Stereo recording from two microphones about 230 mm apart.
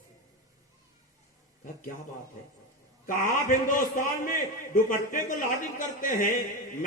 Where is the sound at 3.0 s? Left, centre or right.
Left.